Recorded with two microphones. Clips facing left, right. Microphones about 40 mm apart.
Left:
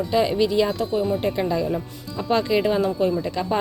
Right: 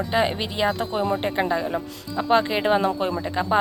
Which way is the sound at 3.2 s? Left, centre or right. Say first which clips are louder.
Right 1 dB; right.